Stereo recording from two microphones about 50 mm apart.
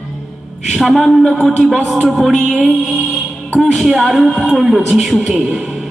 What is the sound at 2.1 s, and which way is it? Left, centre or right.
Music, centre.